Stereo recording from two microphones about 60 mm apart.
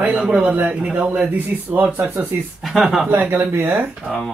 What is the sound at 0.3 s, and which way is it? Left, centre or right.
Speech, right.